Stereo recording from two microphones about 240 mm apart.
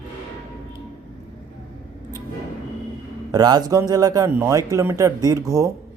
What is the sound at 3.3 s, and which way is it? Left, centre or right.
Speech, centre.